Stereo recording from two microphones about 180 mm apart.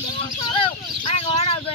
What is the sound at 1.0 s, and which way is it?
Speech, 35° left (ahead or behind).